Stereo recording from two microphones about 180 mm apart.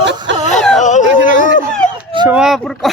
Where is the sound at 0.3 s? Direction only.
85° right.